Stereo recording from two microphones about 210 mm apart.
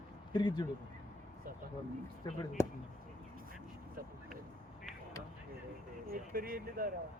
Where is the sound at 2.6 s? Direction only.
10° left (ahead or behind).